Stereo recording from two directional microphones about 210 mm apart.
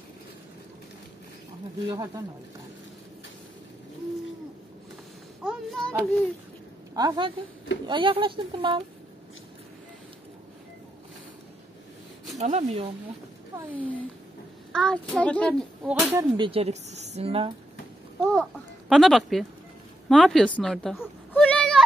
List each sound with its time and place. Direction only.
1.9 s speech: 15° right (ahead or behind)
5.4 s a sound: centre (ahead or behind)
6.9 s a woman's voice: 20° right (ahead or behind)
12.4 s speech: 35° right (ahead or behind)
14.7 s a woman's voice: 5° left (ahead or behind)
15.8 s speech: 10° right (ahead or behind); by 17.5 s 25° right (ahead or behind)
18.2 s a woman's voice: centre (ahead or behind)
21.3 s a sound: 5° left (ahead or behind)